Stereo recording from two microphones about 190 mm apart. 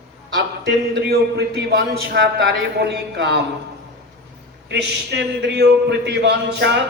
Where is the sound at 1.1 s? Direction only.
60° right (ahead or behind).